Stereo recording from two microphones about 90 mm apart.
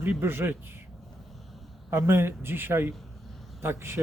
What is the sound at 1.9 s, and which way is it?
Speech, 25° right (ahead or behind).